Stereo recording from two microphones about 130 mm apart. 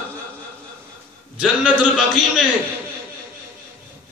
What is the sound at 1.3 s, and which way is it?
Speech, 5° right (ahead or behind).